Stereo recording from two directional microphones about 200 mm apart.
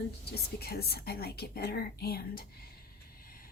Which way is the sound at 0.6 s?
50° left (ahead or behind).